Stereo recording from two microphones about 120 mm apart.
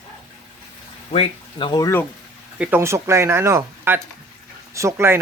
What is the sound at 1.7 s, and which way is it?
Speech, 30° left (ahead or behind).